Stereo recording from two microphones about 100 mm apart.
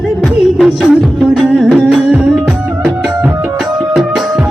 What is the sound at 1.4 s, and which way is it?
Music, centre (ahead or behind).